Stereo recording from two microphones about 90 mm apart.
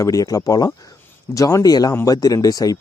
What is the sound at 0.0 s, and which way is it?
Speech, 40° left (ahead or behind).